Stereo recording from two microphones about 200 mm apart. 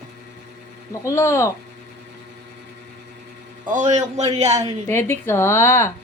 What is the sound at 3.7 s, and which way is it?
Speech, 35° right (ahead or behind).